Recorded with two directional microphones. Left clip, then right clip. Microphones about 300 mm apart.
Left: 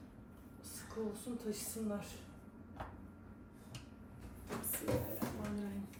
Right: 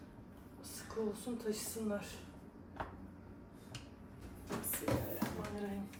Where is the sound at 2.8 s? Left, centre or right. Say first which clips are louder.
Right 4 dB; centre.